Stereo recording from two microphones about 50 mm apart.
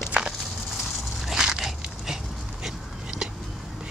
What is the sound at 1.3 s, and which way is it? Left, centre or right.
Dog, centre.